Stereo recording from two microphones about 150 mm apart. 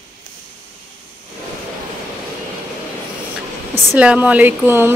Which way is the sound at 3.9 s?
10° right (ahead or behind).